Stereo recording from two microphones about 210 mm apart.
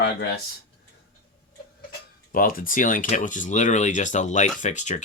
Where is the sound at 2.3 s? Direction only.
45° left (ahead or behind).